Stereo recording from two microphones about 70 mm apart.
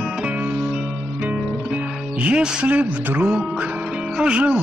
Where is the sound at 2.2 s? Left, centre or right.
Centre.